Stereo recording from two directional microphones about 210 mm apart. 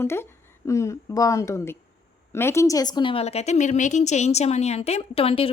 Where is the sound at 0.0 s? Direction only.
10° left (ahead or behind).